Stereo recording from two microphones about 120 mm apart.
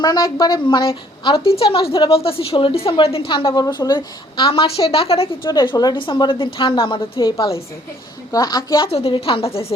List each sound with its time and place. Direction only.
0.0 s a woman's voice: 35° left (ahead or behind)
8.9 s a woman's voice: 55° left (ahead or behind)